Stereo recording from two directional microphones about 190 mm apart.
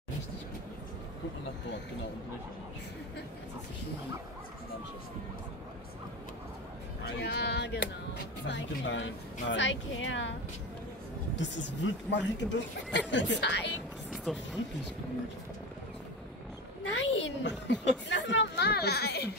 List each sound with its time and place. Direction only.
7.1 s speech: 60° left (ahead or behind); by 10.3 s 85° left
11.3 s speech: 70° left (ahead or behind)
14.1 s a sound: centre (ahead or behind)
16.8 s speech: 80° left; by 19.3 s 55° left (ahead or behind)